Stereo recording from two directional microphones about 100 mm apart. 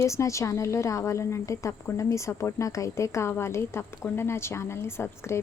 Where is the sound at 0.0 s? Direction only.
30° left (ahead or behind).